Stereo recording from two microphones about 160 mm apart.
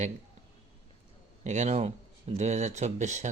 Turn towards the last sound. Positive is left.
turn(degrees=-50)  # may be behind; listen again after turning